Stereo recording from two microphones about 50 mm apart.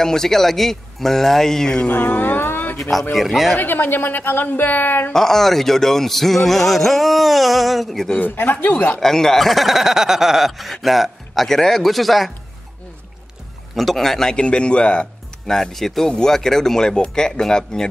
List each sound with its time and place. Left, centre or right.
0.0 s speech: centre
1.9 s a sound: left
2.8 s speech: centre
3.5 s a woman's voice: left
5.1 s speech: centre
8.4 s speech: left
9.0 s speech: centre
13.7 s speech: centre
14.3 s speech: centre
15.5 s speech: centre